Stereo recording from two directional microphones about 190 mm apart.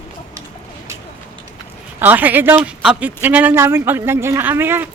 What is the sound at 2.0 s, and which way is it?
Speech, 10° right (ahead or behind).